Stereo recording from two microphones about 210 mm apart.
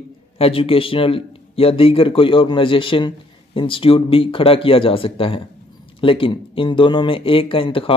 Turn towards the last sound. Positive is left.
turn(degrees=25)  # may be behind; listen again after turning